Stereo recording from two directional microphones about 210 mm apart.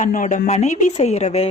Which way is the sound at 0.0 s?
35° left (ahead or behind).